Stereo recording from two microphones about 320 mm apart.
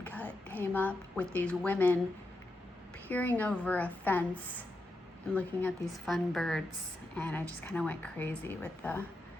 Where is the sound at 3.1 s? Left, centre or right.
Centre.